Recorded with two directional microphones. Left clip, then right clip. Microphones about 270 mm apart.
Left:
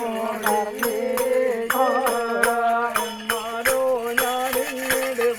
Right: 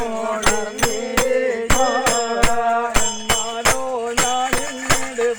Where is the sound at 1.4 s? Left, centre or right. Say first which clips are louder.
Right 2 dB; right.